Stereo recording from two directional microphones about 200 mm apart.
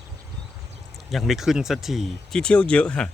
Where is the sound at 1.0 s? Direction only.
Centre (ahead or behind).